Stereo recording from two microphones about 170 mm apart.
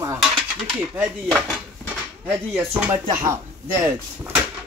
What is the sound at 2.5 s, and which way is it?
Speech, 15° right (ahead or behind).